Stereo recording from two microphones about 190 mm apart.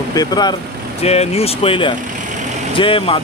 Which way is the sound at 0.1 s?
20° left (ahead or behind).